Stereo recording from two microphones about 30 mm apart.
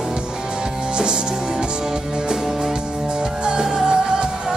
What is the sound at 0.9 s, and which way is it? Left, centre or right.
Music, right.